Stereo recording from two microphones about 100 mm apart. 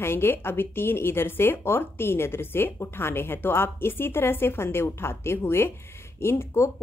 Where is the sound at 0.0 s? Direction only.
25° left (ahead or behind).